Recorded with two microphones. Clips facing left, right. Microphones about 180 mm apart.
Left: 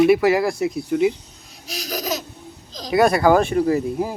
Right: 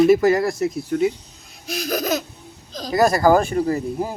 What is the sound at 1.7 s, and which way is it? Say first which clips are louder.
Laughter: right 4 dB; 55° right (ahead or behind).